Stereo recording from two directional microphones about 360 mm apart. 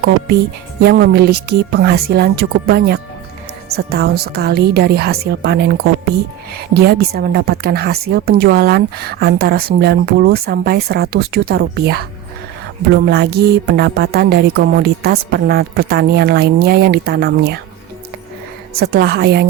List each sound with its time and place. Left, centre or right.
0.8 s a woman's voice: right
18.8 s a woman's voice: right